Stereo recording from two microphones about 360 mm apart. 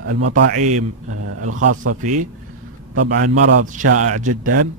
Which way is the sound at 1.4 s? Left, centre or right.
Right.